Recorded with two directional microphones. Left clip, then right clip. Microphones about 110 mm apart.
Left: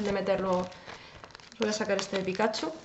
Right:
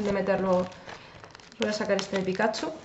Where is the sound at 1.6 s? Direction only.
Centre (ahead or behind).